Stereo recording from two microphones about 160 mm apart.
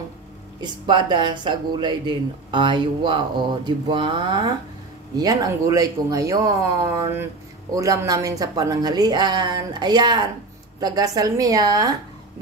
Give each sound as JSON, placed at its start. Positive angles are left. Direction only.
{"t": 0.6, "sound": "speech", "side_deg": -30}